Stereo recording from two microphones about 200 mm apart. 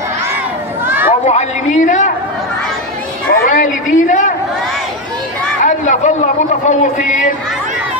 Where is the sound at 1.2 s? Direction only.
35° left (ahead or behind).